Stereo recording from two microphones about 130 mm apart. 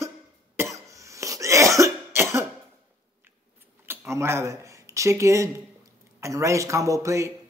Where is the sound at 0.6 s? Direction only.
25° right (ahead or behind).